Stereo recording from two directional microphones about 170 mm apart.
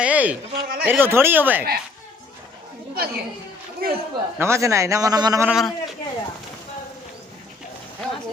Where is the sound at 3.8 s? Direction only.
65° right (ahead or behind).